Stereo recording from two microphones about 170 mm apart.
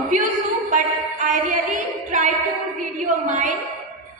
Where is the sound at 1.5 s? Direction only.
50° right (ahead or behind).